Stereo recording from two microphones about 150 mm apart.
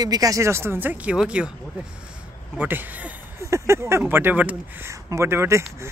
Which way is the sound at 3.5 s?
20° right (ahead or behind).